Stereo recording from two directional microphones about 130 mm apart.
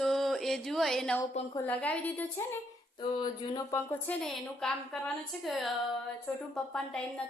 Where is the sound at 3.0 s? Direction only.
35° left (ahead or behind).